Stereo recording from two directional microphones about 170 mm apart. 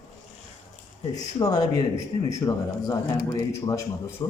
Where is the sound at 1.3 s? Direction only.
25° left (ahead or behind).